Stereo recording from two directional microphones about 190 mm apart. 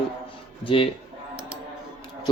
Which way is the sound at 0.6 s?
30° left (ahead or behind).